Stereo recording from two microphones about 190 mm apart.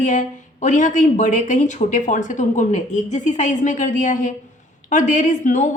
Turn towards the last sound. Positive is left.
turn(degrees=40)  # may be behind; listen again after turning